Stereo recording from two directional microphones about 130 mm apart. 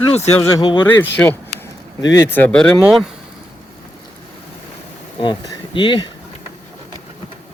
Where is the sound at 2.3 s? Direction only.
15° left (ahead or behind).